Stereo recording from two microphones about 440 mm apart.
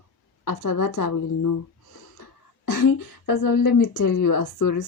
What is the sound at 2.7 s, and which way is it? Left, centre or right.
Speech, left.